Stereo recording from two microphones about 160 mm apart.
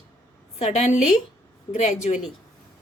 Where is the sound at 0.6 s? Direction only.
45° left (ahead or behind).